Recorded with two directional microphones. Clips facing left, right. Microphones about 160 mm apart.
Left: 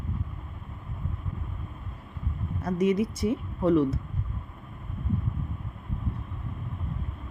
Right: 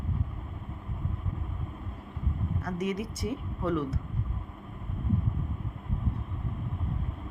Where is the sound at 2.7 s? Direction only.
20° left (ahead or behind).